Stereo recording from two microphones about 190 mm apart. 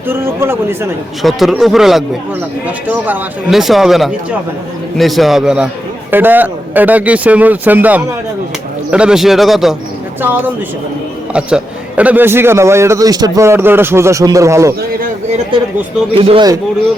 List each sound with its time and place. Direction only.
0.1 s a man's voice: 10° right (ahead or behind)
1.2 s a man's voice: centre (ahead or behind)
16.1 s speech: 30° right (ahead or behind)